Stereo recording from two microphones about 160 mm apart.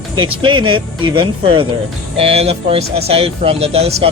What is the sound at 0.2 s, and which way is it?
Speech, 30° right (ahead or behind).